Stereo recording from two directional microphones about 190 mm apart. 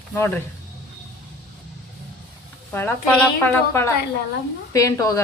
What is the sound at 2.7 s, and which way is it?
A woman's voice, 10° left (ahead or behind).